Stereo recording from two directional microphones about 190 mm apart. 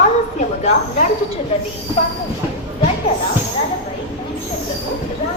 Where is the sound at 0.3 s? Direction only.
40° left (ahead or behind).